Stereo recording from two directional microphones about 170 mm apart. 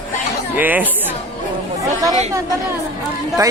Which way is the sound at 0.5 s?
10° right (ahead or behind).